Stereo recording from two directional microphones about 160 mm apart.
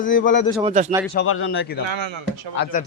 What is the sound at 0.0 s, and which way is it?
Speech, 55° left (ahead or behind).